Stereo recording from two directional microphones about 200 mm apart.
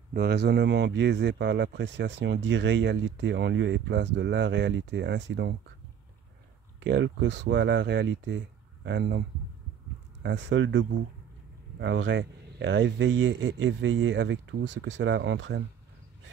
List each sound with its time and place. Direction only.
0.1 s speech: 50° right (ahead or behind)
6.8 s speech: 60° right (ahead or behind)
10.2 s speech: 60° right (ahead or behind)